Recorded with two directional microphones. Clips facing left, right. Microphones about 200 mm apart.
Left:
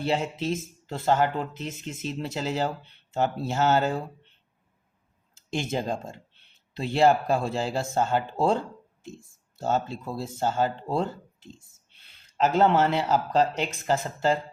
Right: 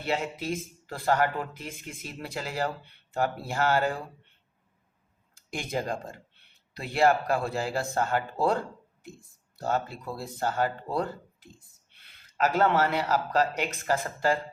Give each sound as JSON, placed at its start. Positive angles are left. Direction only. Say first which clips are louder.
{"t": 0.0, "sound": "speech", "louder": "left 4 dB", "side_deg": 30}
{"t": 5.5, "sound": "speech", "louder": "left 3 dB", "side_deg": 25}
{"t": 9.6, "sound": "speech", "louder": "left 3 dB", "side_deg": 25}
{"t": 12.4, "sound": "speech", "louder": "left 3 dB", "side_deg": 25}